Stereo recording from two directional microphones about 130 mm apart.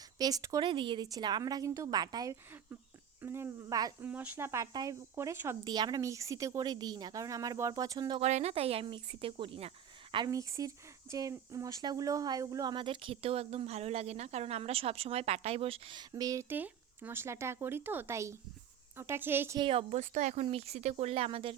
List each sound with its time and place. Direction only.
0.2 s speech: 30° right (ahead or behind)
0.7 s speech: 40° right (ahead or behind)
4.0 s speech: 15° right (ahead or behind)
5.6 s speech: 30° right (ahead or behind)
8.2 s speech: 55° right (ahead or behind)
10.2 s speech: 25° right (ahead or behind)
19.5 s speech: 45° right (ahead or behind)
20.0 s speech: 65° right (ahead or behind); by 21.5 s 50° right (ahead or behind)